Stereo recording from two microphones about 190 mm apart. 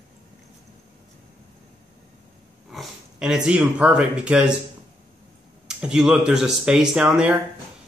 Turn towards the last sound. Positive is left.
turn(degrees=-5)  # may be behind; listen again after turning